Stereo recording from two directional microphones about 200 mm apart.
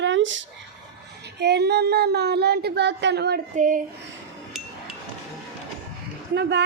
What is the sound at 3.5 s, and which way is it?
Speech, 40° right (ahead or behind).